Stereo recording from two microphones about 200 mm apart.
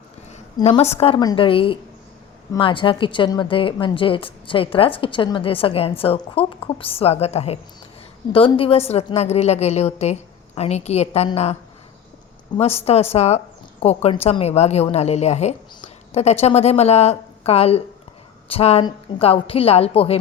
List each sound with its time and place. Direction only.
0.3 s a sound: 35° left (ahead or behind)
0.7 s a woman's voice: 30° left (ahead or behind)
12.5 s a woman's voice: 30° left (ahead or behind)